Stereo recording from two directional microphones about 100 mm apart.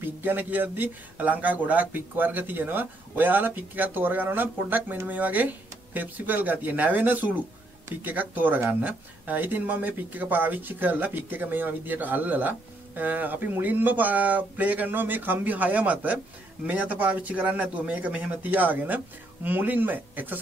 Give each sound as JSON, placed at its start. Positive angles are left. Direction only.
{"t": 0.0, "sound": "speech", "side_deg": -20}